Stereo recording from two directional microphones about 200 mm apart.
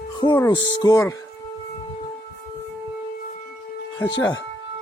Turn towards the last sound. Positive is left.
turn(degrees=15)  # may be behind; listen again after turning